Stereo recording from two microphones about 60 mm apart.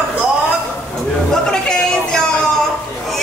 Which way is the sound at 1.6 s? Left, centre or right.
Centre.